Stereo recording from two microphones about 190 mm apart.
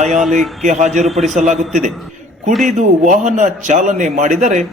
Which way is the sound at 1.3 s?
40° right (ahead or behind).